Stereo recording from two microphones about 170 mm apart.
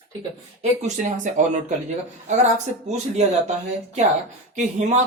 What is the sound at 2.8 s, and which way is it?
Speech, 40° right (ahead or behind).